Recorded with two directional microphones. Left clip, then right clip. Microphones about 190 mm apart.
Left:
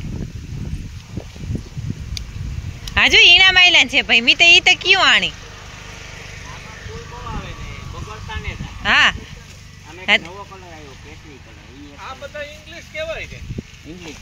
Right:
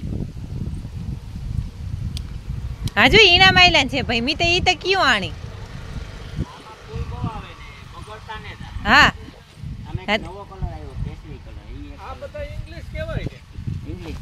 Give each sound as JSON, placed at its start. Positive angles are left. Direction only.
{"t": 2.9, "sound": "a woman's voice", "side_deg": -30}
{"t": 8.8, "sound": "speech", "side_deg": -25}